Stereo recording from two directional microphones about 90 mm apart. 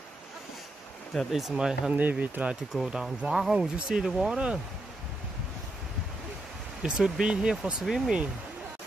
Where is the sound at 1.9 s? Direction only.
20° right (ahead or behind).